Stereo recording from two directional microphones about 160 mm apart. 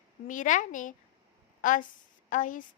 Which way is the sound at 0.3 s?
55° left (ahead or behind).